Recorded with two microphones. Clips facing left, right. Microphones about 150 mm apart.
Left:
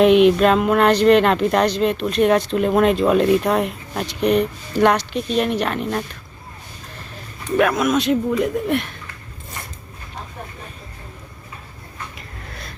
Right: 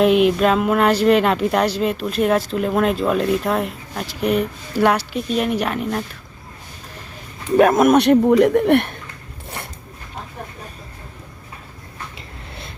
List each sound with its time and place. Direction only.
0.0 s speech: 5° right (ahead or behind)
7.5 s speech: 40° right (ahead or behind); by 9.0 s 60° right (ahead or behind)